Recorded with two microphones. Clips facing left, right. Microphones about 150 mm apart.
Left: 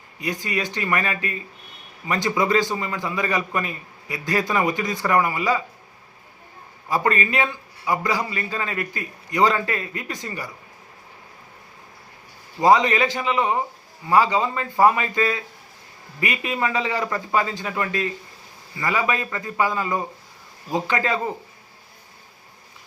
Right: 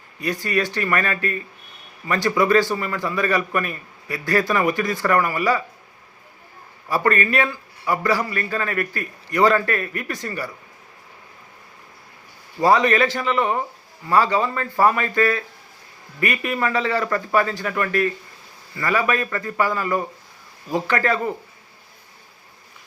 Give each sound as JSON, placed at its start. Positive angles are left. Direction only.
{"t": 0.2, "sound": "a man's voice", "side_deg": 15}
{"t": 6.9, "sound": "a man's voice", "side_deg": 20}
{"t": 12.5, "sound": "a man's voice", "side_deg": 20}